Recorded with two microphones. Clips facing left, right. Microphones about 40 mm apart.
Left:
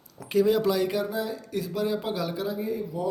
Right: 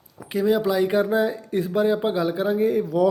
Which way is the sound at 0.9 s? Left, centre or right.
Right.